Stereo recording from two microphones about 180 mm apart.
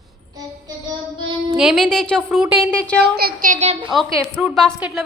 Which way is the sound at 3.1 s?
55° right (ahead or behind).